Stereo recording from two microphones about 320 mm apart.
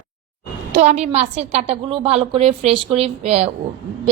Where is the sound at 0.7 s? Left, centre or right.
Right.